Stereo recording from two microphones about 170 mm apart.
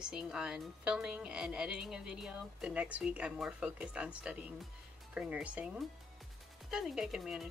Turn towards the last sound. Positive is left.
turn(degrees=0)  # may be behind; listen again after turning